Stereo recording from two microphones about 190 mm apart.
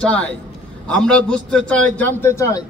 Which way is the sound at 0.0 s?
5° left (ahead or behind).